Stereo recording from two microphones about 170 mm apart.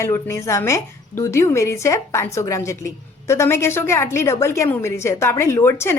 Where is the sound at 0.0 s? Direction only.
15° left (ahead or behind).